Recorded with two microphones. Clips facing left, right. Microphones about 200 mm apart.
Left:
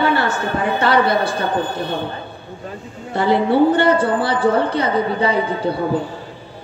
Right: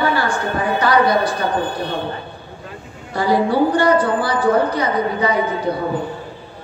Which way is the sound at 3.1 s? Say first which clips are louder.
Left 1 dB; 25° left (ahead or behind).